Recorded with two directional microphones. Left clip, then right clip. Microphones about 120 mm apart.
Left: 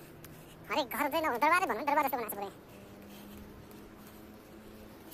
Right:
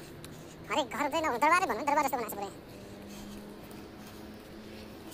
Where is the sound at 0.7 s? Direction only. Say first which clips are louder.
Right 1 dB; 35° left (ahead or behind).